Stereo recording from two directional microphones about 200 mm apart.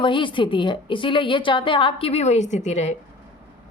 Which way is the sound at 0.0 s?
25° left (ahead or behind).